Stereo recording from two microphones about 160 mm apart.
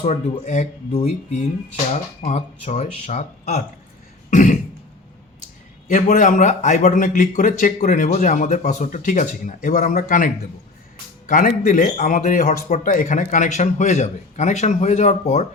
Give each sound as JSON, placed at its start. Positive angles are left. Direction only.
{"t": 0.0, "sound": "a man's voice", "side_deg": 45}
{"t": 4.3, "sound": "cough", "side_deg": 50}
{"t": 5.9, "sound": "a man's voice", "side_deg": 50}